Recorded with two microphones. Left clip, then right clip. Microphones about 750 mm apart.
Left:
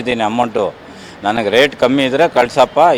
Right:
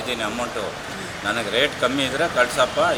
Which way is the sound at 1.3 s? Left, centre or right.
Left.